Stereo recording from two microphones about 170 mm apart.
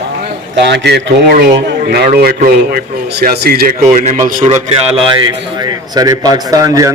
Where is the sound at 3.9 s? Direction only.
45° right (ahead or behind).